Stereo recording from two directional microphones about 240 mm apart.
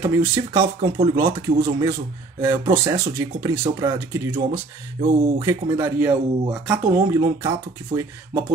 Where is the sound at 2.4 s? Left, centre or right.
Centre.